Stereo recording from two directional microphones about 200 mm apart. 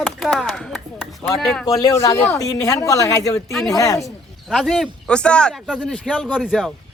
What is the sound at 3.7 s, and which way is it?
Speech, 15° left (ahead or behind).